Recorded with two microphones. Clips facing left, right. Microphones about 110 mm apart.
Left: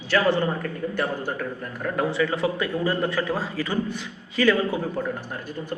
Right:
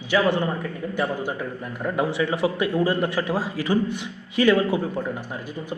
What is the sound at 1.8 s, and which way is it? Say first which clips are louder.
A man's voice: even; 15° right (ahead or behind).